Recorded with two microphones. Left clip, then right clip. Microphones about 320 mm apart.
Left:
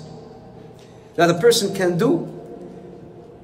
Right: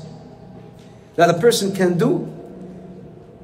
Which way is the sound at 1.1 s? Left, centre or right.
Centre.